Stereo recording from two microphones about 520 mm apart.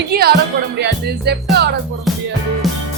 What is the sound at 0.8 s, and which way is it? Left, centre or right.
Music, centre.